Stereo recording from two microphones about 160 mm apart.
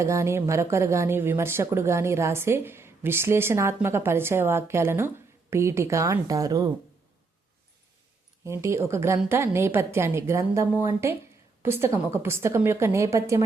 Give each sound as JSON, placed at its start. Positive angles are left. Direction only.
{"t": 0.0, "sound": "a woman's voice", "side_deg": -15}
{"t": 8.4, "sound": "a woman's voice", "side_deg": -15}